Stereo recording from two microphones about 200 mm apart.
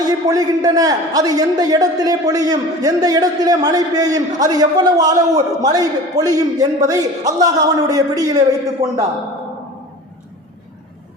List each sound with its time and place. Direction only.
0.3 s a man's voice: 20° right (ahead or behind)